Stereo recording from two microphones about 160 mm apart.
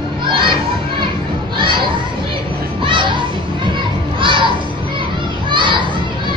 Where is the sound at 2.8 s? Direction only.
30° right (ahead or behind).